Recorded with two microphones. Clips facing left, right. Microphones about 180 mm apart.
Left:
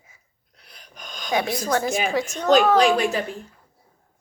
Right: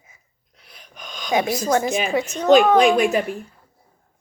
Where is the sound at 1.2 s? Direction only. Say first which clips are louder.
Right 3 dB; 20° right (ahead or behind).